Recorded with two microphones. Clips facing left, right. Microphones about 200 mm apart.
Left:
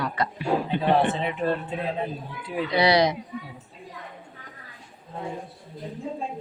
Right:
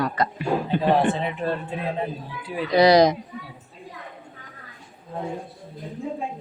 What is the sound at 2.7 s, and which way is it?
Speech, 40° right (ahead or behind).